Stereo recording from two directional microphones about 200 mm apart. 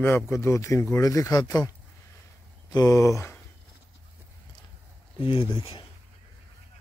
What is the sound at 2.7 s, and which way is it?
Speech, 15° left (ahead or behind).